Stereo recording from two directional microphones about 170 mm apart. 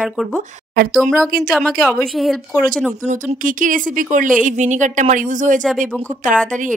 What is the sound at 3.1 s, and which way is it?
A woman's voice, 50° right (ahead or behind).